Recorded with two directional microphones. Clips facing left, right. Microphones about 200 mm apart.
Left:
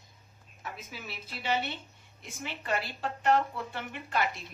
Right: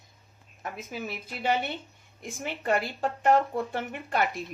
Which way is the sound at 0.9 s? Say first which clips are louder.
Right 7 dB; 45° right (ahead or behind).